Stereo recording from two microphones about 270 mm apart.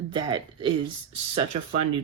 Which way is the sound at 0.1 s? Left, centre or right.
Centre.